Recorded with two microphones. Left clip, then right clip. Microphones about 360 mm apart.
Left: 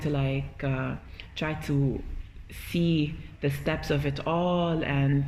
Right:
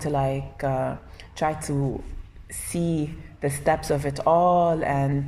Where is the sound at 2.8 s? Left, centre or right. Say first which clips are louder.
Right 1 dB; right.